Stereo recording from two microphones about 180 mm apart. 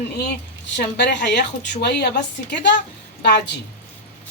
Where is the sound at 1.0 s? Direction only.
75° left (ahead or behind).